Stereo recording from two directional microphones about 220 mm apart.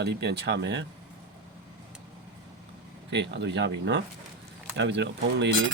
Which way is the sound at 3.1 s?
55° right (ahead or behind).